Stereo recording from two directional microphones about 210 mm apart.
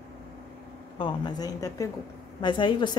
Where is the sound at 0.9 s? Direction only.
20° left (ahead or behind).